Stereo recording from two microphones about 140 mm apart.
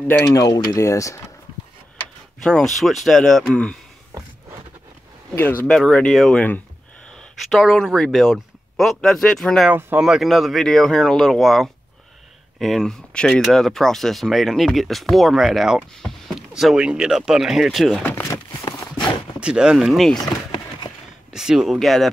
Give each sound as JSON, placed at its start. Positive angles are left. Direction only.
{"t": 0.3, "sound": "speech", "side_deg": 25}
{"t": 2.4, "sound": "speech", "side_deg": 5}
{"t": 5.3, "sound": "speech", "side_deg": 15}
{"t": 7.4, "sound": "speech", "side_deg": 0}
{"t": 9.7, "sound": "speech", "side_deg": -10}
{"t": 10.0, "sound": "speech", "side_deg": 0}
{"t": 18.0, "sound": "a sound", "side_deg": 20}
{"t": 19.4, "sound": "speech", "side_deg": -5}
{"t": 21.3, "sound": "speech", "side_deg": -5}